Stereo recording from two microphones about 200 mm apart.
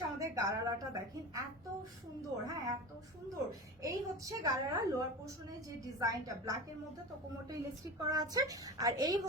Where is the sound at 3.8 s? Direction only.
15° right (ahead or behind).